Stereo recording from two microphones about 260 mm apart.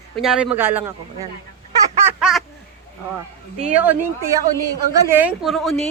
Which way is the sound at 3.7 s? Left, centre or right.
Centre.